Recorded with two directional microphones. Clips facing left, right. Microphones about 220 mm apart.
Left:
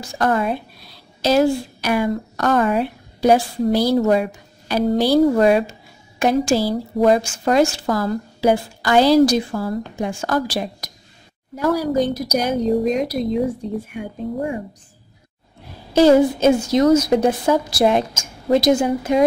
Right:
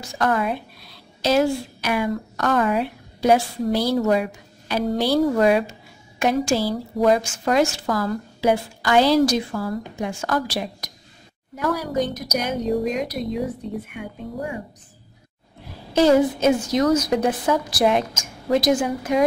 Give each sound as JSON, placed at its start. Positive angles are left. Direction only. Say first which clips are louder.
{"t": 0.0, "sound": "a woman's voice", "louder": "left 3 dB", "side_deg": 30}
{"t": 15.9, "sound": "a woman's voice", "louder": "left 4 dB", "side_deg": 30}